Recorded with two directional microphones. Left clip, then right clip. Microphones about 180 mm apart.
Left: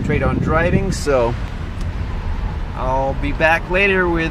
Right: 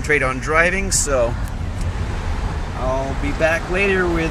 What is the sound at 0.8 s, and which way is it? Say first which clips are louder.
Speech: left 2 dB; 35° left (ahead or behind).